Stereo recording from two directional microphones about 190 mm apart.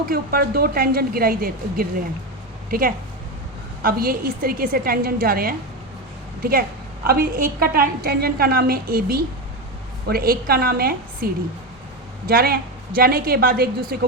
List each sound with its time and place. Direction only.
0.1 s a woman's voice: 50° right (ahead or behind)